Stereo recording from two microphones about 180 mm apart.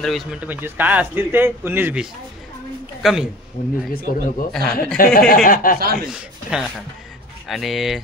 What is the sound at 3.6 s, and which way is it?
Speech, 50° left (ahead or behind).